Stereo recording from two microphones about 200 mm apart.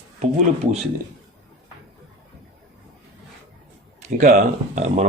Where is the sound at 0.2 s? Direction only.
35° right (ahead or behind).